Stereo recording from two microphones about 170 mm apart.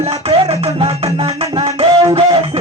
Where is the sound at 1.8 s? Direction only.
35° right (ahead or behind).